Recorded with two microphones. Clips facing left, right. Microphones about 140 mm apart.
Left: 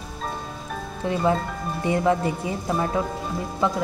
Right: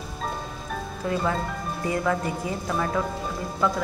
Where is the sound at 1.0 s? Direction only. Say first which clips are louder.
Left 4 dB; 25° left (ahead or behind).